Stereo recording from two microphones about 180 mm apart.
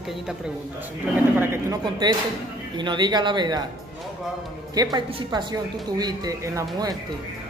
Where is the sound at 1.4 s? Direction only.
15° right (ahead or behind).